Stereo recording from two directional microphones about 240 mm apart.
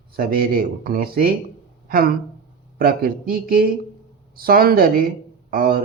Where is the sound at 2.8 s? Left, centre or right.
Right.